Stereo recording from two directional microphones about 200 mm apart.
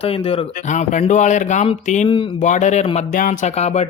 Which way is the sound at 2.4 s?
35° left (ahead or behind).